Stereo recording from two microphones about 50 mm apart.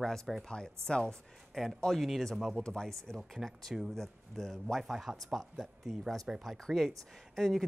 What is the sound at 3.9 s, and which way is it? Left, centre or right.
Speech, centre.